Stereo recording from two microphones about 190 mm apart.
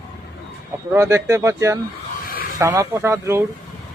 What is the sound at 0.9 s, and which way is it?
Speech, 15° right (ahead or behind).